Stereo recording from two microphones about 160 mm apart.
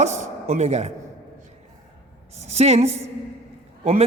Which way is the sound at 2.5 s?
40° right (ahead or behind).